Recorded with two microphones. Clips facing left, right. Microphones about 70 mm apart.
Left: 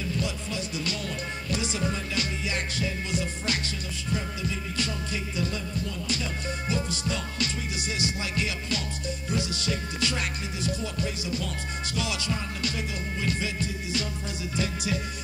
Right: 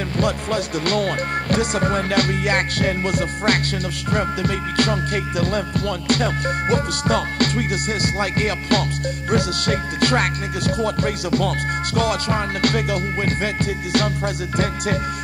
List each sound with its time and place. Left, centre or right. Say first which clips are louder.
0.2 s music: right 11 dB; right